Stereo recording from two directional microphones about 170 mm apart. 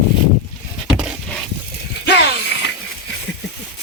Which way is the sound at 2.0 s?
80° left.